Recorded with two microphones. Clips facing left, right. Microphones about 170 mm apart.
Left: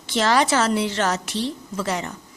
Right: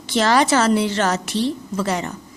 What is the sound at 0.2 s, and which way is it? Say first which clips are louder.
A woman's voice: right 3 dB; 45° right (ahead or behind).